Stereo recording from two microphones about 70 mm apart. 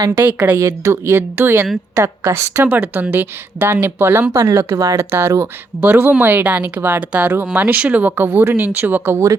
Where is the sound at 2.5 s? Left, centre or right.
Right.